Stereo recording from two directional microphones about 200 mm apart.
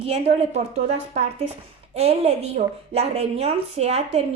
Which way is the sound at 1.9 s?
30° right (ahead or behind).